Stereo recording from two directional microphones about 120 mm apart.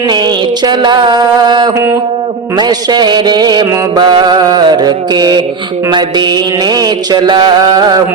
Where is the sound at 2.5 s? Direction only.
35° right (ahead or behind).